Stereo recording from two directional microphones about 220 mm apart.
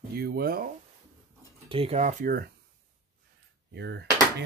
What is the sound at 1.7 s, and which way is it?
Speech, 25° right (ahead or behind).